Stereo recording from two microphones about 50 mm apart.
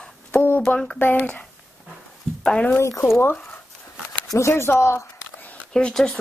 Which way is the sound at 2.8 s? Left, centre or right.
Left.